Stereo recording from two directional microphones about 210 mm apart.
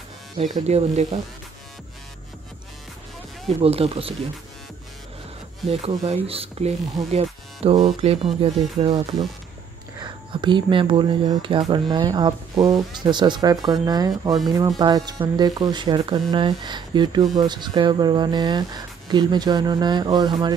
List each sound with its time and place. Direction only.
0.7 s speech: 30° right (ahead or behind)
3.4 s speech: 30° right (ahead or behind)
5.7 s speech: 30° right (ahead or behind)